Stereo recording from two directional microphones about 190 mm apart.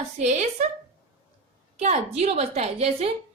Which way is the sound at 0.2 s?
35° right (ahead or behind).